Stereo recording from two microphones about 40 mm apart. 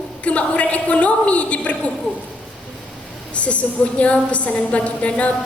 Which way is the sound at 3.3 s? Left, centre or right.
Left.